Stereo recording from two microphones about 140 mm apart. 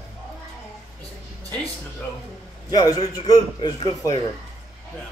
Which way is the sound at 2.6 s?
25° left (ahead or behind).